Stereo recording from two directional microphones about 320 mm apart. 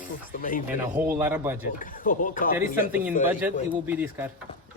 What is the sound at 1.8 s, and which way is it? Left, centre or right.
Speech, left.